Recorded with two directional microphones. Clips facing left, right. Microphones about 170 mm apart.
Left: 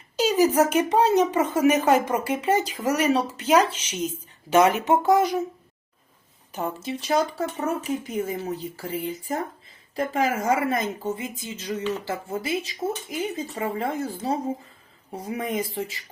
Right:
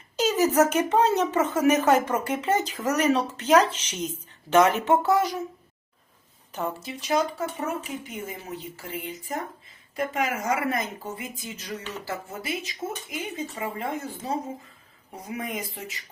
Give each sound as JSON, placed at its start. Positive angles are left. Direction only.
{"t": 0.2, "sound": "speech", "side_deg": 10}
{"t": 6.8, "sound": "speech", "side_deg": 30}